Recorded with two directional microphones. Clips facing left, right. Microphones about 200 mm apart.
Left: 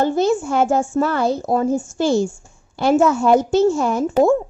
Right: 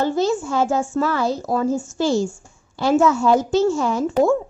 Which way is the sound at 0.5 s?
55° left (ahead or behind).